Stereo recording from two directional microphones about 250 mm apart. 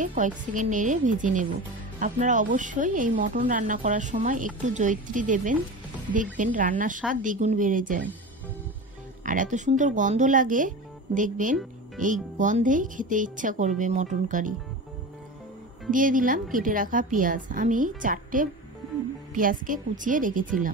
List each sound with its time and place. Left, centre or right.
0.0 s speech: right
9.2 s speech: right
15.9 s speech: right